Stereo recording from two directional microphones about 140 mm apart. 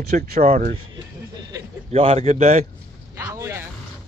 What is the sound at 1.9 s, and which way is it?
Speech, 45° right (ahead or behind).